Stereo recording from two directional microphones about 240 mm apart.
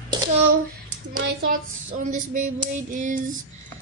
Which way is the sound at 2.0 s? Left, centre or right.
Right.